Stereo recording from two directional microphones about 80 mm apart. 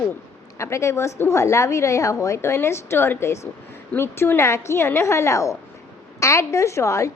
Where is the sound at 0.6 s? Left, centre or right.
Left.